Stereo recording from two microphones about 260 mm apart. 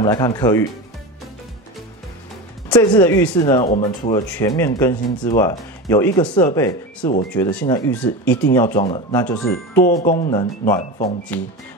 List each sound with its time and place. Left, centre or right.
0.0 s speech: centre
2.7 s speech: centre
3.7 s speech: left
4.1 s speech: centre
9.8 s speech: left